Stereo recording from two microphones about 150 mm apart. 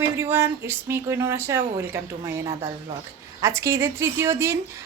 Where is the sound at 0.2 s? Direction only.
15° right (ahead or behind).